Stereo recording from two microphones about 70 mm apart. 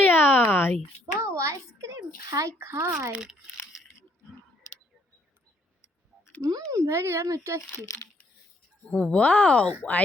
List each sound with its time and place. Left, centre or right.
0.0 s a sound: left
1.2 s a child's voice: right
2.6 s speech: right
3.1 s speech: centre
6.5 s a child's voice: right
7.7 s a child's voice: left
8.9 s speech: centre